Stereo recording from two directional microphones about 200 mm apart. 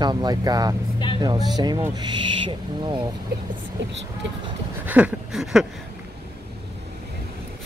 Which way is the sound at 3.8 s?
65° right (ahead or behind).